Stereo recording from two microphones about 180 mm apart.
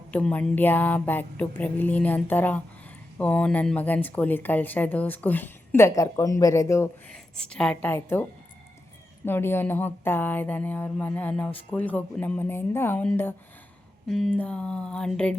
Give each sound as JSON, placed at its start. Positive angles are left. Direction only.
{"t": 0.1, "sound": "speech", "side_deg": 5}
{"t": 7.1, "sound": "speech", "side_deg": 5}
{"t": 14.1, "sound": "a sound", "side_deg": 5}